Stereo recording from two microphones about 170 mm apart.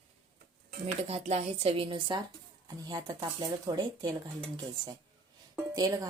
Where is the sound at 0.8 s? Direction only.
35° right (ahead or behind).